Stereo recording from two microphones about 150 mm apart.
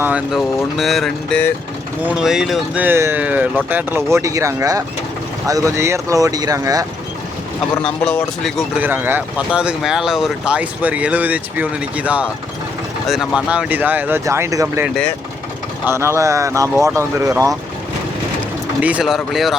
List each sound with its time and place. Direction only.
0.0 s speech: 5° right (ahead or behind); by 6.8 s 25° right (ahead or behind)
7.8 s speech: 5° left (ahead or behind)
8.8 s speech: 15° right (ahead or behind)
15.9 s speech: 15° right (ahead or behind)
18.8 s speech: 10° right (ahead or behind)